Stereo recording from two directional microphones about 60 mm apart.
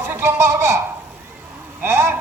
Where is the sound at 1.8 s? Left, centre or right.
Right.